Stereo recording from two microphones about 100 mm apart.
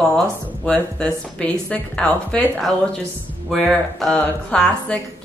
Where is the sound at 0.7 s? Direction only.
10° left (ahead or behind).